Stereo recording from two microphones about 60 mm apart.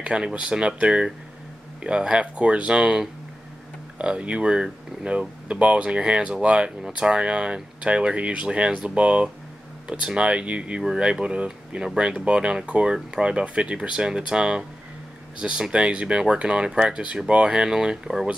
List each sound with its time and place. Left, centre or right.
0.0 s speech: centre